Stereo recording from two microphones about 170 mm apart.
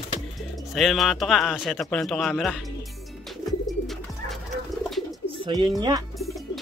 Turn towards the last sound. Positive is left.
turn(degrees=-25)  # may be behind; listen again after turning